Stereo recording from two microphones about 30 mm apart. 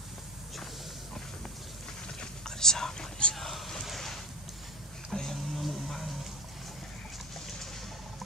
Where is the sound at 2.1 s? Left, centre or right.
Left.